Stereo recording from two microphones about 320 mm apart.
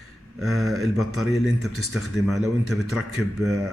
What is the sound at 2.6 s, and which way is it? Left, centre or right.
Speech, right.